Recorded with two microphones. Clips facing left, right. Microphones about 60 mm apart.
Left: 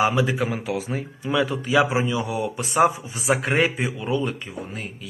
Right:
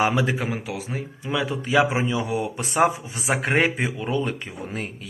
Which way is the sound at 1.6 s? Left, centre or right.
Right.